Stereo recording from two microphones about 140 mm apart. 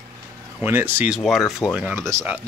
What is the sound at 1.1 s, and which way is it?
Speech, centre (ahead or behind).